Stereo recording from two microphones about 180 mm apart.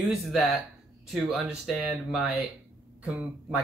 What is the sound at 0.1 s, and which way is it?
Speech, 5° right (ahead or behind).